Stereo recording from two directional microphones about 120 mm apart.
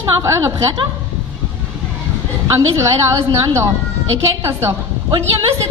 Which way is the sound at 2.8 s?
25° right (ahead or behind).